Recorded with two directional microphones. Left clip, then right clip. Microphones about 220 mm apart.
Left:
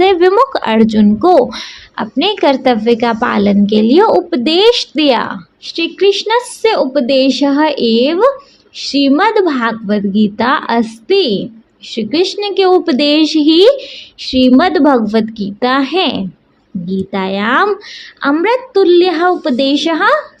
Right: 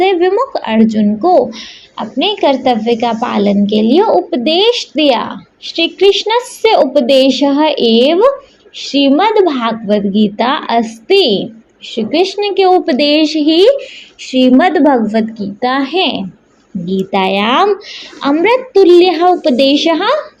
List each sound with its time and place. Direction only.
0.0 s speech: 40° left (ahead or behind)